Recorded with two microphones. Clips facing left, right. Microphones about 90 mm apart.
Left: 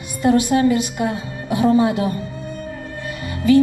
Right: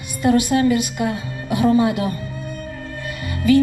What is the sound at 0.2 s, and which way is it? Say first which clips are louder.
A woman's voice: left 1 dB; 25° left (ahead or behind).